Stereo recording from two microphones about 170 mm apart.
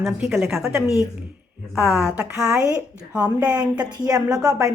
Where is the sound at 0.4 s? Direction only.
15° right (ahead or behind).